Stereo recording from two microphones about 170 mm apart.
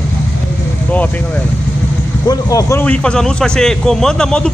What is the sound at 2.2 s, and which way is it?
A man's voice, 20° left (ahead or behind).